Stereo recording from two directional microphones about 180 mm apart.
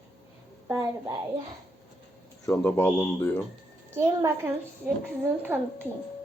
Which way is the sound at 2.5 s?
15° left (ahead or behind).